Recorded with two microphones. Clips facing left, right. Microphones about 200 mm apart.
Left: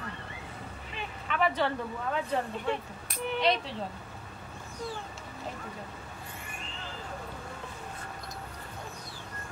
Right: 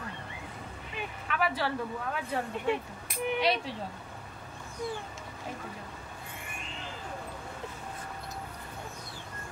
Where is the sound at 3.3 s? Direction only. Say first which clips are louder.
Left 1 dB; 10° right (ahead or behind).